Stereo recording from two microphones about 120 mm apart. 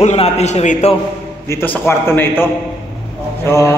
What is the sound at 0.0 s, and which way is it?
Speech, 65° left (ahead or behind).